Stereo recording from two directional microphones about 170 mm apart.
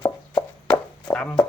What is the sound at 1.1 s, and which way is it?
Speech, 5° left (ahead or behind).